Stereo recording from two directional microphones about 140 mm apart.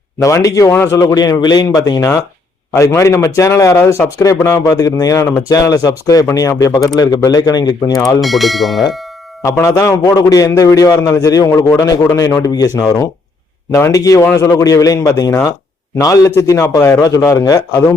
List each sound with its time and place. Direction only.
0.2 s speech: 25° left (ahead or behind)
8.2 s speech: centre (ahead or behind)
9.4 s speech: 20° left (ahead or behind)